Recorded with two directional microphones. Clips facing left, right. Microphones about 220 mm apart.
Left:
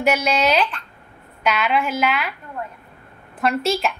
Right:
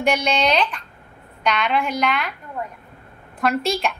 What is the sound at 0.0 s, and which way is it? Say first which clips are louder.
A woman's voice: left 1 dB; 5° left (ahead or behind).